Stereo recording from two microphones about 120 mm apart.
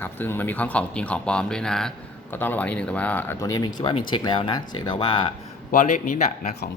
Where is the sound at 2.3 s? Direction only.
15° left (ahead or behind).